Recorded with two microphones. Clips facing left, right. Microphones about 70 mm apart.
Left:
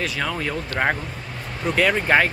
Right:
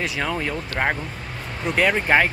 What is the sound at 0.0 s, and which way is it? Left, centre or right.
Speech, centre.